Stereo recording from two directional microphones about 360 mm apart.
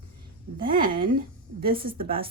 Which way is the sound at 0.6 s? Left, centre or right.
Right.